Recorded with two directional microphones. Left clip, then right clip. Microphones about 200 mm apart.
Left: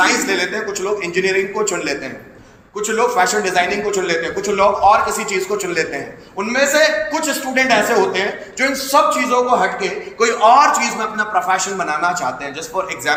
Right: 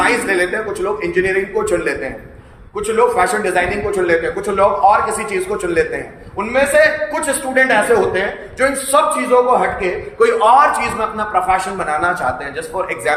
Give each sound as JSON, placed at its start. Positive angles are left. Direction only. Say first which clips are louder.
{"t": 0.0, "sound": "a man's voice", "louder": "right 1 dB", "side_deg": -20}
{"t": 2.7, "sound": "a woman's voice", "louder": "right 2 dB", "side_deg": -20}